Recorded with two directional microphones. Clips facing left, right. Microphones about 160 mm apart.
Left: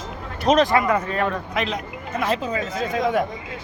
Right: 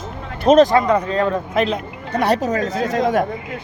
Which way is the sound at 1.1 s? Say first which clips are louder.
Right 5 dB; 25° right (ahead or behind).